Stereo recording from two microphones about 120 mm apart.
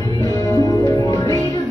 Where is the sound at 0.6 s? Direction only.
30° left (ahead or behind).